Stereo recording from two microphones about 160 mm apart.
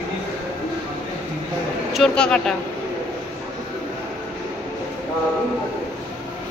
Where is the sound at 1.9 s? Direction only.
5° left (ahead or behind).